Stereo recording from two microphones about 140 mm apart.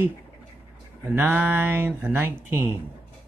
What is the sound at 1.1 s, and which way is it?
Speech, 15° right (ahead or behind).